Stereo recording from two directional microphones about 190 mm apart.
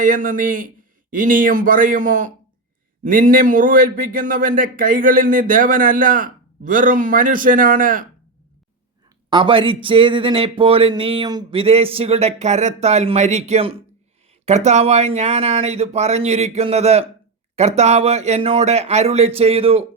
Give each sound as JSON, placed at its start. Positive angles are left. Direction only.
{"t": 0.0, "sound": "speech", "side_deg": -45}
{"t": 9.3, "sound": "speech", "side_deg": -25}